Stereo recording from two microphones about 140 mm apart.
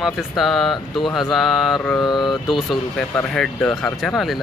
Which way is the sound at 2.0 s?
30° left (ahead or behind).